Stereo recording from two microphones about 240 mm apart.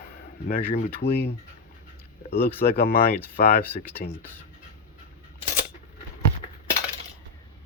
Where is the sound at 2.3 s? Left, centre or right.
Left.